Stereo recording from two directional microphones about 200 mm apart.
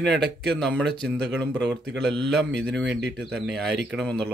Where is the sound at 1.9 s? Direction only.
55° right (ahead or behind).